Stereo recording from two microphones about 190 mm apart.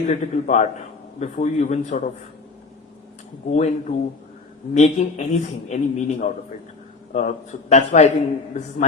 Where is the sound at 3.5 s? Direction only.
35° left (ahead or behind).